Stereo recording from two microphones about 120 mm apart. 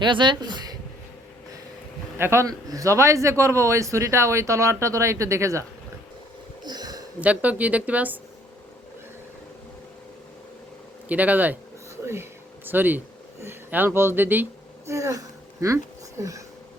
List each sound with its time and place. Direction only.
0.0 s speech: 40° right (ahead or behind)
2.1 s a man's voice: 20° right (ahead or behind)
6.7 s a sound: 35° right (ahead or behind)
7.2 s speech: 10° right (ahead or behind)
11.1 s speech: 15° right (ahead or behind)
14.8 s a sound: 25° right (ahead or behind)